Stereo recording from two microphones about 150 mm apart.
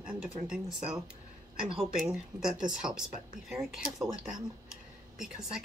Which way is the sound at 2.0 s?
5° right (ahead or behind).